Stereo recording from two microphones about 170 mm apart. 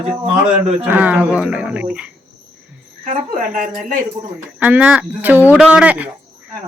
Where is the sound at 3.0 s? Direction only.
50° right (ahead or behind).